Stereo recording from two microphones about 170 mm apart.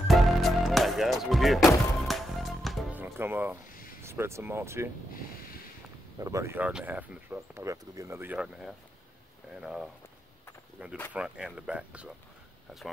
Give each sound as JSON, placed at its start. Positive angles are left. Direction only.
{"t": 0.1, "sound": "music", "side_deg": 0}
{"t": 3.0, "sound": "music", "side_deg": -10}
{"t": 4.0, "sound": "speech", "side_deg": -15}
{"t": 6.1, "sound": "speech", "side_deg": -20}